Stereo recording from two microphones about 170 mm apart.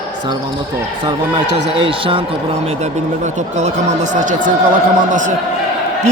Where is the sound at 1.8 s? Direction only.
30° right (ahead or behind).